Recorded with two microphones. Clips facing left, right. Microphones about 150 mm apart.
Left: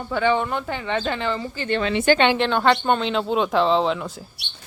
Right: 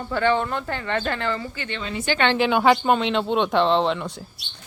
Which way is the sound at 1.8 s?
85° left.